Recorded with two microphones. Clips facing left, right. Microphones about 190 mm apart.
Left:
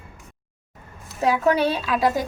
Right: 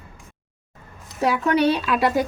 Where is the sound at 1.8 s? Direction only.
65° right (ahead or behind).